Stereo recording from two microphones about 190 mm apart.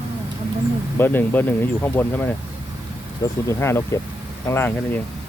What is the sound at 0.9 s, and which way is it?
Speech, 10° left (ahead or behind).